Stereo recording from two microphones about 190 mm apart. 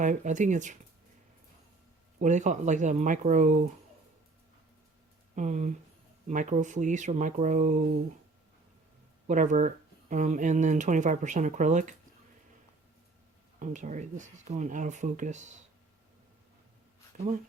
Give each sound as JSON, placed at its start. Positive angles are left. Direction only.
{"t": 0.0, "sound": "speech", "side_deg": -40}
{"t": 2.1, "sound": "speech", "side_deg": -40}
{"t": 5.3, "sound": "speech", "side_deg": -40}
{"t": 9.2, "sound": "speech", "side_deg": -40}
{"t": 13.6, "sound": "speech", "side_deg": -40}
{"t": 17.1, "sound": "speech", "side_deg": -45}